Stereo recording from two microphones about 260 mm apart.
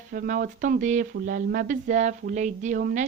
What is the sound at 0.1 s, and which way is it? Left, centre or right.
A woman's voice, right.